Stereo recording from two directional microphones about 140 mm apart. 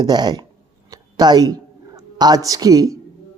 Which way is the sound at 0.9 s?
30° right (ahead or behind).